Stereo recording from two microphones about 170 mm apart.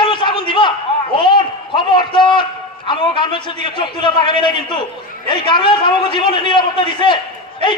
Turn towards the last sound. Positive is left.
turn(degrees=30)  # may be behind; listen again after turning